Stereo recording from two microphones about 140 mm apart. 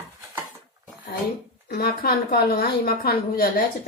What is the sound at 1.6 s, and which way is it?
A woman's voice, 90° left.